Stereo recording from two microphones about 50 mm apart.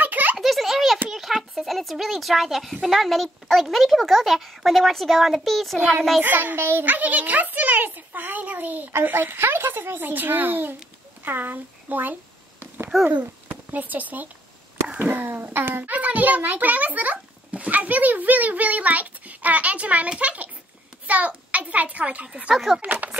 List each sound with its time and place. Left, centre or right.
0.0 s a sound: right
0.4 s a sound: centre
1.1 s a child's voice: centre
6.2 s a child's voice: right
6.8 s a child's voice: right
11.2 s a sound: right
13.1 s a child's voice: right
15.8 s a child's voice: right
22.8 s a child's voice: right